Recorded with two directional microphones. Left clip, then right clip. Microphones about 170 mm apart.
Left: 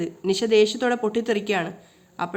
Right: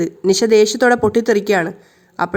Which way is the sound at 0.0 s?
35° right (ahead or behind).